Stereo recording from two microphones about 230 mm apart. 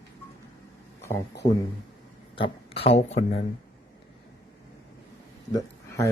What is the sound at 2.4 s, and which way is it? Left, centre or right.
Speech, left.